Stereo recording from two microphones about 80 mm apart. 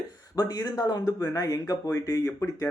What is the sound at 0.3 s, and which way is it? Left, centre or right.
Speech, left.